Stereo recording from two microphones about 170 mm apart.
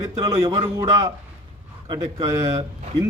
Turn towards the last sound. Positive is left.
turn(degrees=-20)  # may be behind; listen again after turning